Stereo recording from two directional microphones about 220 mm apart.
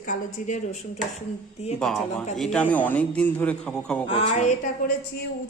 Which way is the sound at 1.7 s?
5° left (ahead or behind).